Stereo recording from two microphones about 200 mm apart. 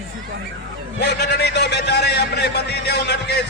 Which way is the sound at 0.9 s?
55° left (ahead or behind).